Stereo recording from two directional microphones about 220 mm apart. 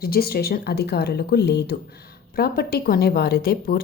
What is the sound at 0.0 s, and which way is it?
Speech, 45° left (ahead or behind).